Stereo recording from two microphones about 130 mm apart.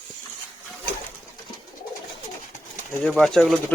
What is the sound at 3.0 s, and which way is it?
Speech, 5° left (ahead or behind).